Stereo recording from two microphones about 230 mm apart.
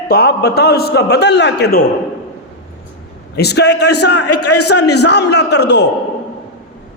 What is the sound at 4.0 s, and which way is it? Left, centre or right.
Speech, left.